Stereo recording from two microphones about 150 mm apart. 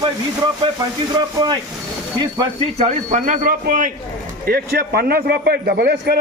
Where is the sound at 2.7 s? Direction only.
50° right (ahead or behind).